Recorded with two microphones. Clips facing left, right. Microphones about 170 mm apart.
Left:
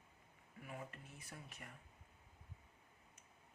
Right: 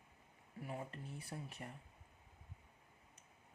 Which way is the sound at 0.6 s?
30° right (ahead or behind).